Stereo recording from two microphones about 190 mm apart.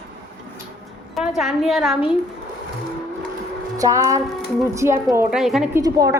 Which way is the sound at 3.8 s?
15° right (ahead or behind).